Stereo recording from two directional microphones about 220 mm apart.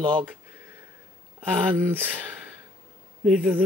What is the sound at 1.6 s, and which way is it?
Speech, 10° right (ahead or behind).